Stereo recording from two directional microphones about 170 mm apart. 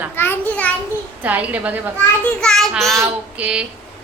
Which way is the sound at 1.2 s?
10° right (ahead or behind).